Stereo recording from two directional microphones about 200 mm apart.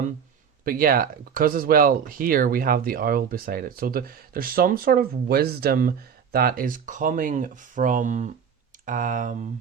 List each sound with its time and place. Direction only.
0.6 s speech: 45° right (ahead or behind)